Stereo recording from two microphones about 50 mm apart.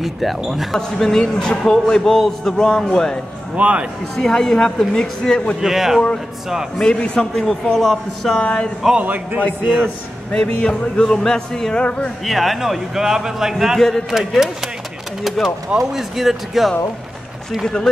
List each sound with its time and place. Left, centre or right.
0.0 s speech: centre
0.7 s a man's voice: centre
3.5 s a man's voice: right
4.2 s a man's voice: centre
5.6 s speech: centre
6.8 s a man's voice: centre
8.4 s speech: left
9.0 s a man's voice: right
10.3 s a man's voice: centre
12.3 s a man's voice: centre
13.7 s a man's voice: centre
14.1 s speech: centre